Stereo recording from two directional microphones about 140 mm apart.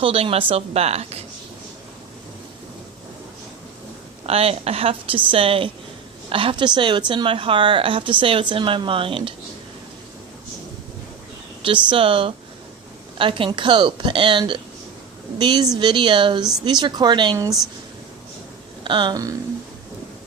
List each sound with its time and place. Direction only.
0.0 s a woman's voice: 45° right (ahead or behind)
4.3 s a woman's voice: 45° right (ahead or behind)
11.6 s a woman's voice: 40° right (ahead or behind)
18.9 s a woman's voice: 35° right (ahead or behind)